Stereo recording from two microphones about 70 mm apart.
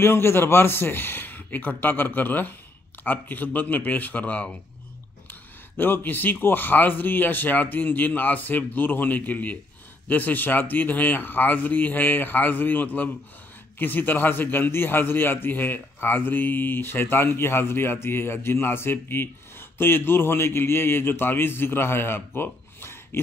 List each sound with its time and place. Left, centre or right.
0.0 s a man's voice: left; by 4.6 s centre
5.3 s a man's voice: left